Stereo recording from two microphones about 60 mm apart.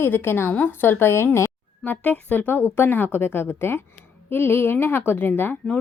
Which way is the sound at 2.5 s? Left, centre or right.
Left.